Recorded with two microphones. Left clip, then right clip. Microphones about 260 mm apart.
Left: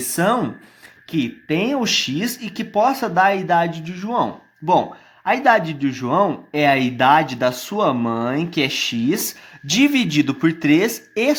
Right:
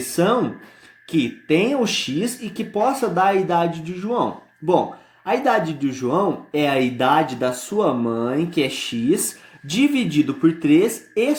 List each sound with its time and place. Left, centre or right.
0.1 s speech: left